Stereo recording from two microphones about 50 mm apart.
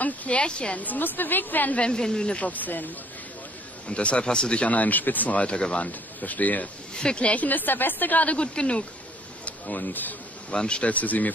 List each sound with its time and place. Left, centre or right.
0.0 s a sound: left
0.4 s speech: left
0.7 s speech: left
1.8 s speech: centre
2.3 s speech: left
3.9 s speech: left
5.9 s speech: left
7.0 s speech: centre
7.4 s speech: left
9.4 s speech: left
10.5 s speech: centre